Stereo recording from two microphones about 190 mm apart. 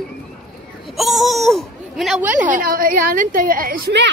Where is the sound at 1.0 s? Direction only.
Centre (ahead or behind).